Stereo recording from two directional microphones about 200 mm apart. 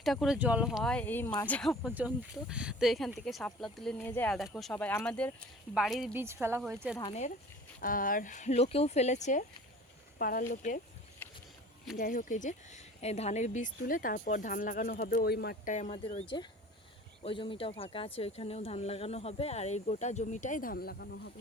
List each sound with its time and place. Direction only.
0.0 s speech: centre (ahead or behind)
6.2 s speech: 10° right (ahead or behind)
7.1 s speech: 35° left (ahead or behind)
11.2 s a sound: 10° left (ahead or behind)
11.9 s speech: 45° left (ahead or behind)
15.7 s speech: 30° left (ahead or behind); by 21.3 s 55° left (ahead or behind)